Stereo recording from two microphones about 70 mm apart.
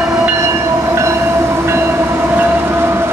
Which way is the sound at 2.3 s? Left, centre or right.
Right.